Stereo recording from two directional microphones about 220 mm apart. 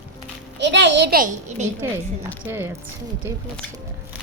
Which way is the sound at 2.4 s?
10° right (ahead or behind).